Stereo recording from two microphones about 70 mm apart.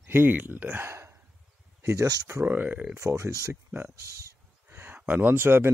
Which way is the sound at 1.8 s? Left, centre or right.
Right.